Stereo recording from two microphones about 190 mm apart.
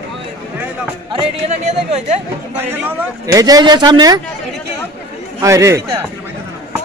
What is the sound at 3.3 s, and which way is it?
Speech, 20° right (ahead or behind).